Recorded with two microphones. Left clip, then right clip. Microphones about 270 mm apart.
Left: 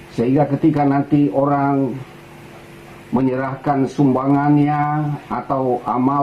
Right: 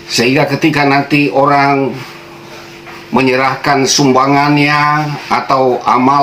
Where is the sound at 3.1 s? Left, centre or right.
Right.